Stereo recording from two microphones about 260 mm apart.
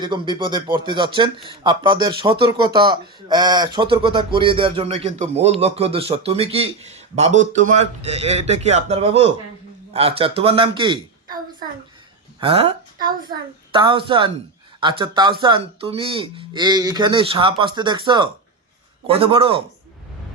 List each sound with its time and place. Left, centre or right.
0.0 s speech: centre